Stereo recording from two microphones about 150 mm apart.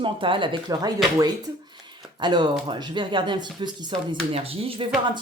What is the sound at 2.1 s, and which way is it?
Speech, 30° right (ahead or behind).